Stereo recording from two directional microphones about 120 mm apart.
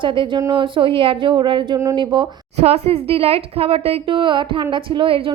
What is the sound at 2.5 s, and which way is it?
Speech, 60° right (ahead or behind).